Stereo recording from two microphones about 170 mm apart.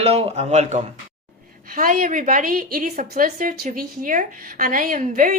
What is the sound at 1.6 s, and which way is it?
A woman's voice, 55° right (ahead or behind).